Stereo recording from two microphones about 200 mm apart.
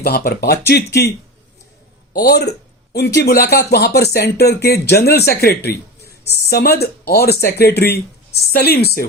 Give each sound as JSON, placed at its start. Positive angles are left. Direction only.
{"t": 0.0, "sound": "speech", "side_deg": 50}
{"t": 2.1, "sound": "speech", "side_deg": 50}